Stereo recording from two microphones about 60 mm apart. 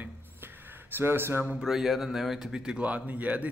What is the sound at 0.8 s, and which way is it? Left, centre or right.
Speech, right.